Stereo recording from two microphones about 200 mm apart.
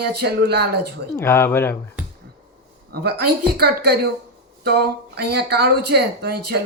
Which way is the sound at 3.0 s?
50° right (ahead or behind).